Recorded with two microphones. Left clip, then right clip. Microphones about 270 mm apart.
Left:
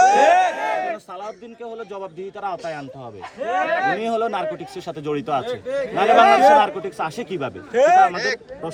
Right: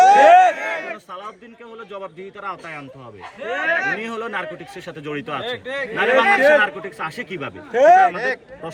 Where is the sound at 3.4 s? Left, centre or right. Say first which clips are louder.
Left 1 dB; left.